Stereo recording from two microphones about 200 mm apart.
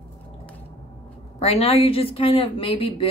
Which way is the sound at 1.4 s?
30° left (ahead or behind).